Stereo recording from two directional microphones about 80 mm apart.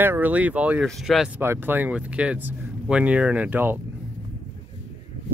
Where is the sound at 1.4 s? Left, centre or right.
Right.